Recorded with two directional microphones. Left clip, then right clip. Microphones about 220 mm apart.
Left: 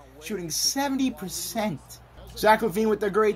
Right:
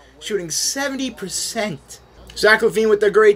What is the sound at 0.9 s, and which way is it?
Speech, 45° left (ahead or behind).